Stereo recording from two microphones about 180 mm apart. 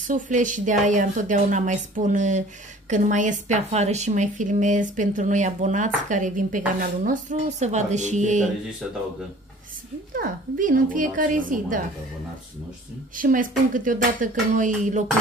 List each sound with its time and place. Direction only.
0.0 s speech: 45° right (ahead or behind)
8.8 s speech: centre (ahead or behind)
10.1 s speech: 50° right (ahead or behind)
13.1 s speech: 50° right (ahead or behind)